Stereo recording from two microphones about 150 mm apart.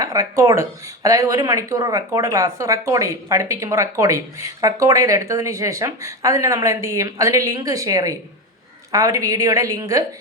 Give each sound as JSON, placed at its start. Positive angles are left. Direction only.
{"t": 0.0, "sound": "speech", "side_deg": -25}